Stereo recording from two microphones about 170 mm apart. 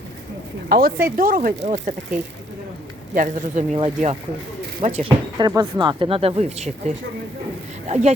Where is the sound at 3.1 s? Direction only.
50° right (ahead or behind).